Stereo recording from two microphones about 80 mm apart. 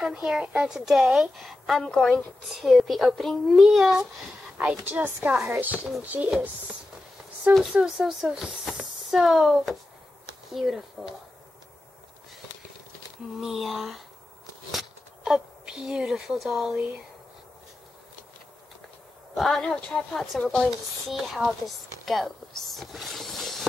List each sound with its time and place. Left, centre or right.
0.0 s a woman's voice: centre
4.8 s a woman's voice: centre
7.5 s a woman's voice: centre
13.4 s a woman's voice: centre
19.3 s a woman's voice: centre